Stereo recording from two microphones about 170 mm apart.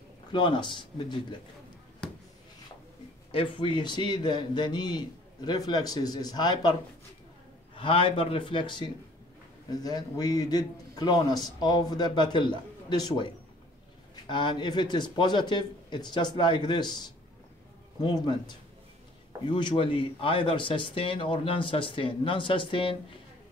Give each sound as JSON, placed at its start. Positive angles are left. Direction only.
{"t": 0.3, "sound": "a man's voice", "side_deg": 25}
{"t": 2.0, "sound": "a sound", "side_deg": 5}
{"t": 3.3, "sound": "a man's voice", "side_deg": 30}
{"t": 18.0, "sound": "a man's voice", "side_deg": 25}
{"t": 19.5, "sound": "speech", "side_deg": 30}